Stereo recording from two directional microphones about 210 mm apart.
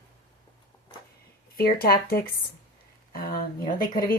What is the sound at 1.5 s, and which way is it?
A woman's voice, 45° left (ahead or behind).